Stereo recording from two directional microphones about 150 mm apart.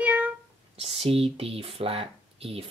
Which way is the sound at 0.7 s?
40° right (ahead or behind).